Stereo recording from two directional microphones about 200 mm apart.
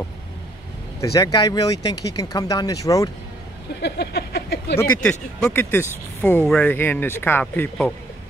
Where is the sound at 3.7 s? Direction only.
55° left (ahead or behind).